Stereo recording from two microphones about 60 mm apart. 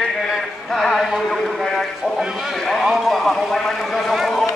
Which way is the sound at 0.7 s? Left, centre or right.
Centre.